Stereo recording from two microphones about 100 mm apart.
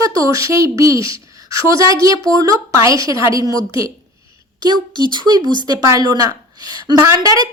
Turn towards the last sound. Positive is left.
turn(degrees=-40)  # may be behind; listen again after turning